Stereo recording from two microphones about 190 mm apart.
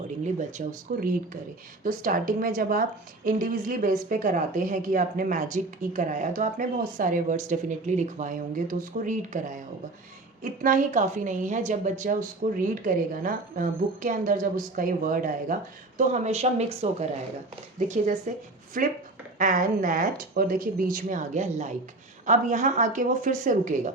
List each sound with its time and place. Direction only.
0.3 s speech: 40° right (ahead or behind)